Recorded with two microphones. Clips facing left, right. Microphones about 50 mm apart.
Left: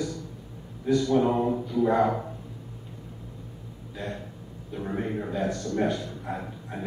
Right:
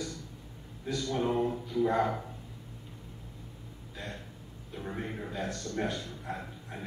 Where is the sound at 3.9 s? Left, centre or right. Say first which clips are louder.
Left 7 dB; centre.